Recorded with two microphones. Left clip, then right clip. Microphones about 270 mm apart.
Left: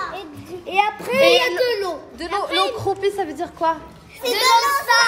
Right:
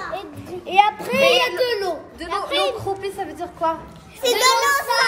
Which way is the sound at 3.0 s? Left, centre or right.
Left.